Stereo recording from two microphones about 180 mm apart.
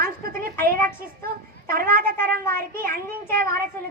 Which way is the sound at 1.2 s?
55° right (ahead or behind).